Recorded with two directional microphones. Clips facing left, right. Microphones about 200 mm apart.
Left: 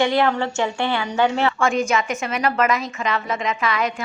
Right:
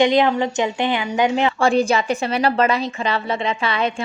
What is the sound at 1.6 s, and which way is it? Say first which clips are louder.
A woman's voice: right 3 dB; 35° right (ahead or behind).